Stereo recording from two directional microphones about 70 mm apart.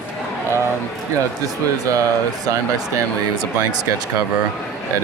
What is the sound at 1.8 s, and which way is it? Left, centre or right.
Speech, right.